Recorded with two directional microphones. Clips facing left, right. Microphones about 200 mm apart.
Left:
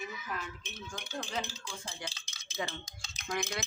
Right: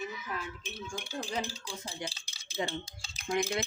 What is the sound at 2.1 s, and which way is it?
Stir, 30° right (ahead or behind).